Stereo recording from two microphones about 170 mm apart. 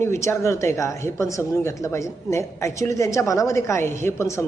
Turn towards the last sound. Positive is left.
turn(degrees=15)  # may be behind; listen again after turning